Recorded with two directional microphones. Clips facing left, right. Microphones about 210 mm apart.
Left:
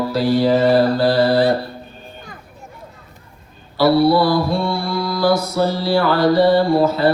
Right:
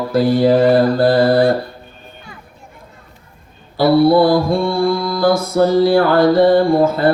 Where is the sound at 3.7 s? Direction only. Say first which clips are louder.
Right 3 dB; 50° right (ahead or behind).